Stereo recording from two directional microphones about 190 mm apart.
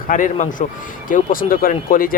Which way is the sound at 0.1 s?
40° left (ahead or behind).